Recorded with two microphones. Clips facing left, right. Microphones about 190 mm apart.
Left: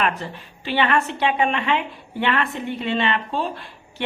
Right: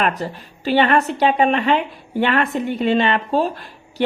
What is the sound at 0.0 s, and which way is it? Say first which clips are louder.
A woman's voice: right 3 dB; 40° right (ahead or behind).